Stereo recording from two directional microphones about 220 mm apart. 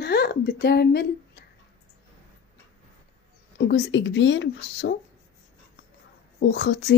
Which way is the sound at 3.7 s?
55° left (ahead or behind).